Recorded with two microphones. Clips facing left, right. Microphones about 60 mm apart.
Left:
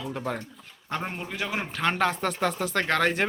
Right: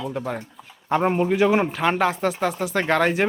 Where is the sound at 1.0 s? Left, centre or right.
Right.